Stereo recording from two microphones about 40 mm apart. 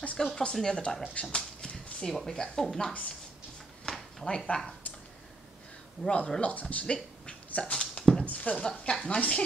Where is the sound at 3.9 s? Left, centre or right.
Centre.